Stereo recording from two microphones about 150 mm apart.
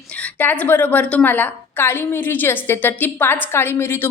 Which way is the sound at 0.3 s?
10° left (ahead or behind).